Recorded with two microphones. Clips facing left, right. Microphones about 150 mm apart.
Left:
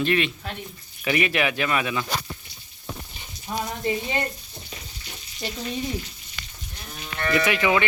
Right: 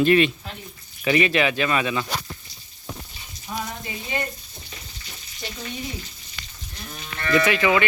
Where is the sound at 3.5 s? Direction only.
35° left (ahead or behind).